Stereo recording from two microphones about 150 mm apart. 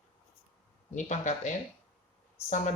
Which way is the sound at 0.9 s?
55° left (ahead or behind).